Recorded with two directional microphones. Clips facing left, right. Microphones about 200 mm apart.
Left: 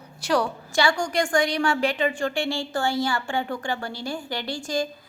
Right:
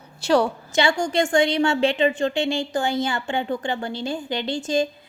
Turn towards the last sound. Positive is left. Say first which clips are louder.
# right 5 dB
turn(degrees=-20)  # may be behind; listen again after turning